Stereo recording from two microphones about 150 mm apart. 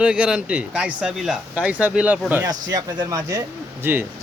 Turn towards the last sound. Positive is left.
turn(degrees=-15)  # may be behind; listen again after turning